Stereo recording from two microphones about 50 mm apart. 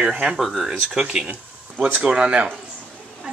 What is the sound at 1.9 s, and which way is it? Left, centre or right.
Speech, right.